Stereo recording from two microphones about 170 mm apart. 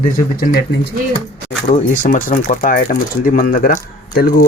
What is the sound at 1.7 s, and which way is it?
Speech, 50° left (ahead or behind).